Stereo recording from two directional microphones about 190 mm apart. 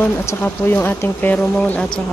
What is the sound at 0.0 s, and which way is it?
Speech, 15° left (ahead or behind).